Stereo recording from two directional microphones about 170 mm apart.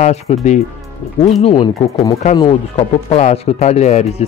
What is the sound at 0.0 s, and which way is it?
Speech, 40° left (ahead or behind).